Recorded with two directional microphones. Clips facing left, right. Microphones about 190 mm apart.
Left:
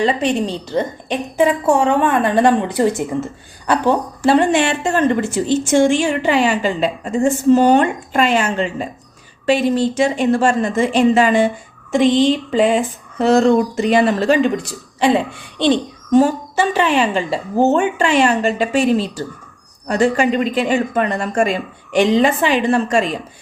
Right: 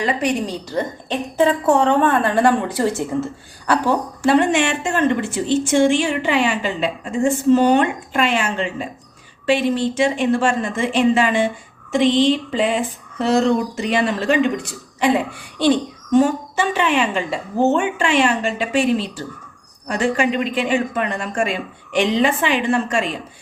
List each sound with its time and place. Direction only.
0.0 s a woman's voice: 25° left (ahead or behind)
4.2 s a woman's voice: 35° left (ahead or behind)
16.1 s a woman's voice: 35° left (ahead or behind)